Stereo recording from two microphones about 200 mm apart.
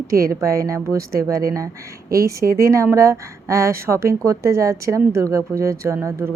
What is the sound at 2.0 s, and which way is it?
Speech, 50° right (ahead or behind).